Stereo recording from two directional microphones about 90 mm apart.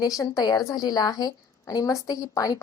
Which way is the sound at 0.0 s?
45° left (ahead or behind).